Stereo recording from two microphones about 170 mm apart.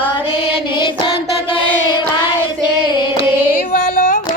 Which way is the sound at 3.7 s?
50° left (ahead or behind).